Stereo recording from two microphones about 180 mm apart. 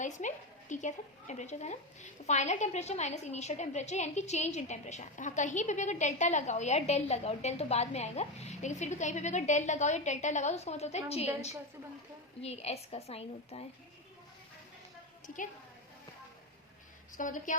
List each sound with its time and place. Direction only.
0.0 s a woman's voice: 45° left (ahead or behind)
12.4 s a woman's voice: 35° left (ahead or behind)
17.2 s a woman's voice: 45° left (ahead or behind)